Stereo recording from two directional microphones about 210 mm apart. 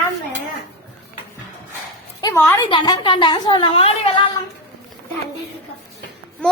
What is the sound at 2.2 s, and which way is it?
Speech, 15° left (ahead or behind).